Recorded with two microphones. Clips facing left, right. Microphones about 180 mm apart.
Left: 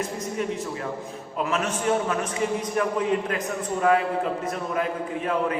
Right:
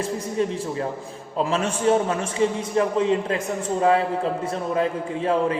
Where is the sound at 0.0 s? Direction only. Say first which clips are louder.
Right 4 dB; 30° right (ahead or behind).